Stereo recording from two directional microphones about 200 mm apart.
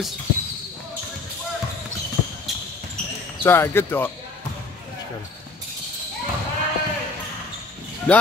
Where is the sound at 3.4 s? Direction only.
10° left (ahead or behind).